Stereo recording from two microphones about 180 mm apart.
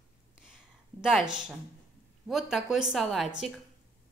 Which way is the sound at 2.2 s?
Centre (ahead or behind).